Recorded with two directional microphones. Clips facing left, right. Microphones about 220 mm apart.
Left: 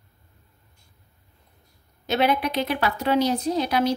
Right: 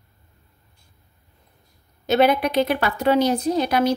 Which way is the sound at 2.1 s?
45° right (ahead or behind).